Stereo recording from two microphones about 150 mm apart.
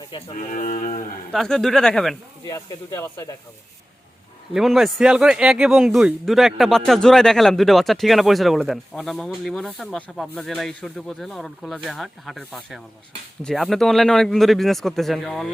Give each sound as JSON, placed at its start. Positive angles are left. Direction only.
{"t": 0.1, "sound": "speech", "side_deg": 35}
{"t": 0.4, "sound": "speech", "side_deg": 55}
{"t": 1.3, "sound": "a man's voice", "side_deg": 5}
{"t": 2.4, "sound": "speech", "side_deg": 25}
{"t": 4.5, "sound": "a man's voice", "side_deg": 0}